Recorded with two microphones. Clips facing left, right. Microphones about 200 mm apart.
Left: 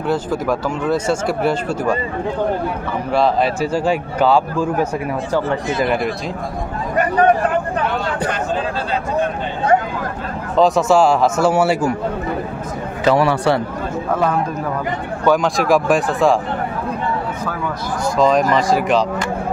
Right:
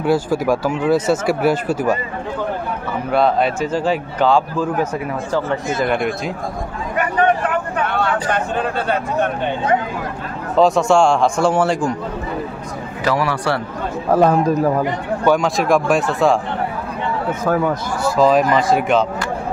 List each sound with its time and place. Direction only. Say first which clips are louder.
0.0 s speech: right 3 dB; 10° right (ahead or behind)
3.1 s a man's voice: even; centre (ahead or behind)
5.9 s a man's voice: even; centre (ahead or behind)
7.0 s a sound: left 3 dB; 35° left (ahead or behind)
7.9 s speech: right 2 dB; 60° right (ahead or behind)
10.5 s a man's voice: even; centre (ahead or behind)
13.0 s a man's voice: left 4 dB; 25° left (ahead or behind)
14.1 s a man's voice: right 6 dB; 35° right (ahead or behind)
15.2 s a man's voice: left 1 dB; centre (ahead or behind)
18.0 s a man's voice: right 1 dB; 5° right (ahead or behind)